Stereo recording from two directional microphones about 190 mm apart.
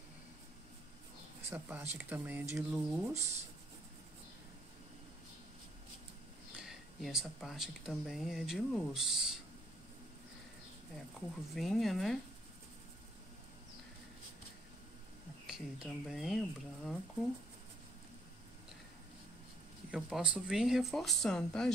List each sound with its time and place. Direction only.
1.5 s speech: 10° right (ahead or behind)
6.5 s speech: 5° right (ahead or behind)
11.1 s speech: centre (ahead or behind)
15.4 s speech: 5° right (ahead or behind)
19.9 s speech: 5° right (ahead or behind)